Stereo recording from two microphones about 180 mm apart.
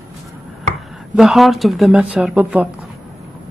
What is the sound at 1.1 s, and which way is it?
Speech, centre (ahead or behind).